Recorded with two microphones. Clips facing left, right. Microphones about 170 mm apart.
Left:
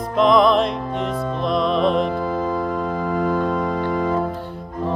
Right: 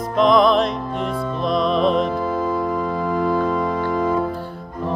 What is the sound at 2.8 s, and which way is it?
Music, 45° left (ahead or behind).